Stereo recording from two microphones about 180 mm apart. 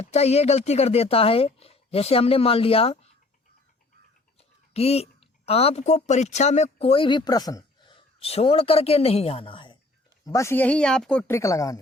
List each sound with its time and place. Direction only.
0.0 s speech: 35° left (ahead or behind)
4.4 s speech: 35° left (ahead or behind)
10.2 s speech: 15° left (ahead or behind)
11.3 s speech: 15° left (ahead or behind)